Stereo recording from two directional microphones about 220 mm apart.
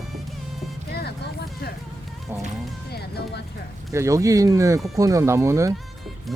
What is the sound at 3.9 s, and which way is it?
Speech, 15° right (ahead or behind).